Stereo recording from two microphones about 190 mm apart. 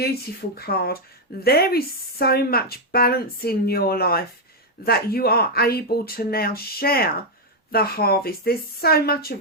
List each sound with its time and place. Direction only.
0.0 s speech: 55° left (ahead or behind)